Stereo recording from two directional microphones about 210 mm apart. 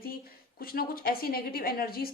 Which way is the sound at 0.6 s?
45° left (ahead or behind).